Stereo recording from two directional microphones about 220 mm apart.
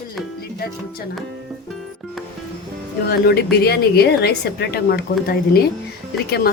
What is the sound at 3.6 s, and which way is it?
A woman's voice, 45° left (ahead or behind).